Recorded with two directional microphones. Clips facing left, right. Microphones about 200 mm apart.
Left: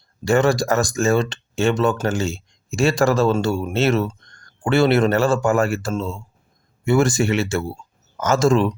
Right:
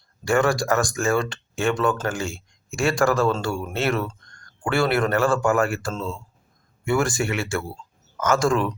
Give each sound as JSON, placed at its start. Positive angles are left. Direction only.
{"t": 0.3, "sound": "speech", "side_deg": 25}